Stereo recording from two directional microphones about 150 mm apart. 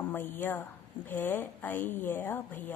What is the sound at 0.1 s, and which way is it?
A woman's voice, 15° left (ahead or behind).